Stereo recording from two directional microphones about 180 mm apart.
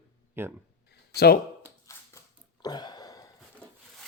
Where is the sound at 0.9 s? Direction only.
60° left (ahead or behind).